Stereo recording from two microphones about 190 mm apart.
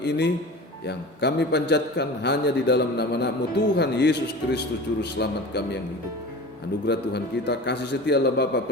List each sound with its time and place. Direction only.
0.0 s a man's voice: 65° left (ahead or behind)
6.8 s a man's voice: 60° left (ahead or behind)